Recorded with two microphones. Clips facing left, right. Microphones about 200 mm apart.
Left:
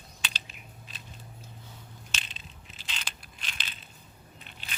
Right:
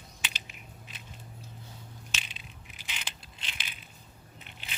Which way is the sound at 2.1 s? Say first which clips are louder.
Left 2 dB; 10° right (ahead or behind).